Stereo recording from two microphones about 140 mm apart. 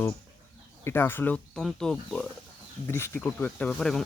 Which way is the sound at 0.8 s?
15° left (ahead or behind).